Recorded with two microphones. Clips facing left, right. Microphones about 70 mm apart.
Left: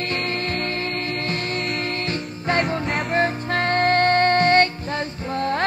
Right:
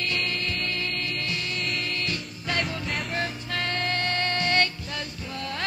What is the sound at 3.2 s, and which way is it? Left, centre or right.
Music, left.